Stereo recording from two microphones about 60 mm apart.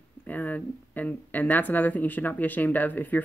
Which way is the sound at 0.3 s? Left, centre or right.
Left.